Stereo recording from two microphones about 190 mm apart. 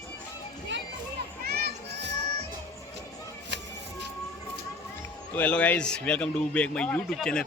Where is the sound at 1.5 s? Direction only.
60° right (ahead or behind).